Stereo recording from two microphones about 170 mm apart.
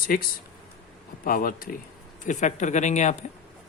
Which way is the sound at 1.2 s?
55° left (ahead or behind).